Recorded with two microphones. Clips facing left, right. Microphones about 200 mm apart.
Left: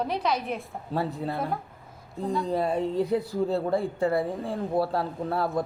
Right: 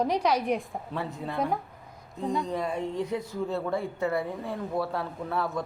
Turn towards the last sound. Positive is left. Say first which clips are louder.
# left 3 dB
turn(degrees=35)  # may be behind; listen again after turning